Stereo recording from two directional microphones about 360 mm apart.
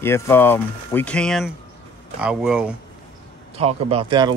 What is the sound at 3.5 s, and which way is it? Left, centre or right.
Speech, centre.